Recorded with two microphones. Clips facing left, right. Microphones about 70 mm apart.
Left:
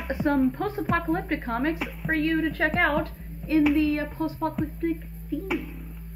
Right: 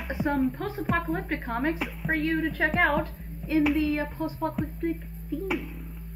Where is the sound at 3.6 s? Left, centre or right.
Centre.